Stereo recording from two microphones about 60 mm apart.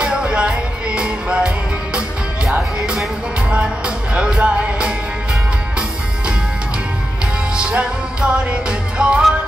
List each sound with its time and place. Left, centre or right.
0.0 s music: centre
3.4 s music: centre
7.5 s music: centre